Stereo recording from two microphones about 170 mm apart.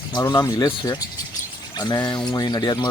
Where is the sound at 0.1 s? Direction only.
25° left (ahead or behind).